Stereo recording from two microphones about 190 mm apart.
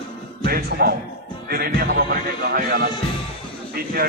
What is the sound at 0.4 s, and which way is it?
Speech, 55° right (ahead or behind).